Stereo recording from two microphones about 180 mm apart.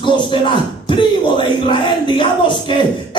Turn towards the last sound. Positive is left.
turn(degrees=25)  # may be behind; listen again after turning